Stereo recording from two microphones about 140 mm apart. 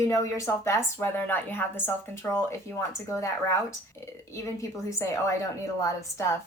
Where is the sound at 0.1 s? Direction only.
25° left (ahead or behind).